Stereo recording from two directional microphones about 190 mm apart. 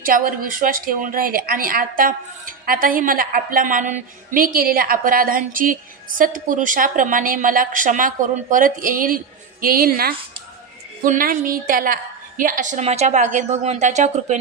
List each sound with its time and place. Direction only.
0.0 s a woman's voice: 50° right (ahead or behind)